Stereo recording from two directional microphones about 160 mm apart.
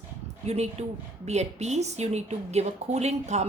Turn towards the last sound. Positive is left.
turn(degrees=-45)  # may be behind; listen again after turning